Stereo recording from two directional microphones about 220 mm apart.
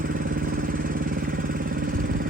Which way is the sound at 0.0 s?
40° right (ahead or behind).